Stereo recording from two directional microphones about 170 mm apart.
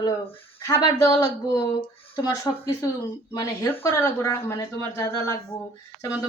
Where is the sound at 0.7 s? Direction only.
20° left (ahead or behind).